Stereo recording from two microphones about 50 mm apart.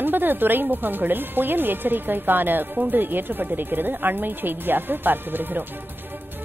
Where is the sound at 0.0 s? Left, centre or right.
Right.